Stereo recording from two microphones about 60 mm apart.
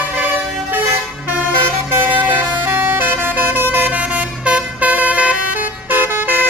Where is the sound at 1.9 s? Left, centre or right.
Right.